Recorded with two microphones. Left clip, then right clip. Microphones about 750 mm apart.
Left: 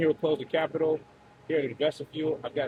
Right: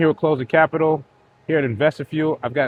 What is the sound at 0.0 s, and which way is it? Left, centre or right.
Speech, right.